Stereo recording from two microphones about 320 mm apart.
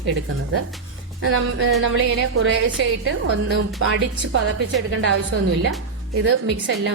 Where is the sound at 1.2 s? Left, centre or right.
Right.